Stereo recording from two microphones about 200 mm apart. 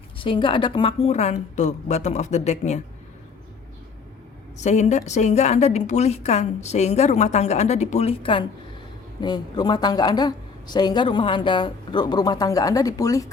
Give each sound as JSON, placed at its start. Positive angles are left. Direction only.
{"t": 0.2, "sound": "a woman's voice", "side_deg": 25}
{"t": 4.5, "sound": "a woman's voice", "side_deg": 35}